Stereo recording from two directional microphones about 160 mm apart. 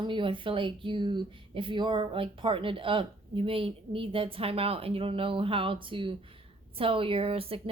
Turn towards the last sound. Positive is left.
turn(degrees=-35)  # may be behind; listen again after turning